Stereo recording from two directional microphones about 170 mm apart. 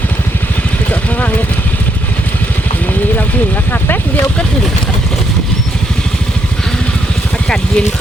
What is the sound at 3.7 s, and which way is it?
Speech, 10° left (ahead or behind).